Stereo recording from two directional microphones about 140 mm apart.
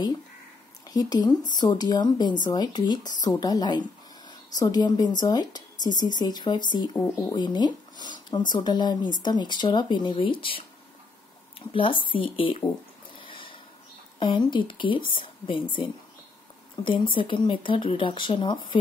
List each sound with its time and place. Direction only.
0.8 s a woman's voice: 30° left (ahead or behind)
12.1 s speech: 40° left (ahead or behind)
13.2 s a sound: 35° left (ahead or behind)
14.2 s speech: 35° left (ahead or behind)